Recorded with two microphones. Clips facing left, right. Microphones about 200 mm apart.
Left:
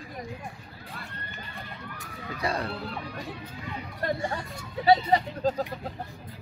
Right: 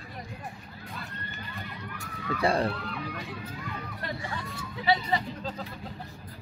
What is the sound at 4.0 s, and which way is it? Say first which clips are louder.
Speech: left 9 dB; 45° left (ahead or behind).